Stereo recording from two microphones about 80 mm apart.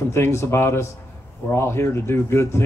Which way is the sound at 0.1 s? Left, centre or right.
Left.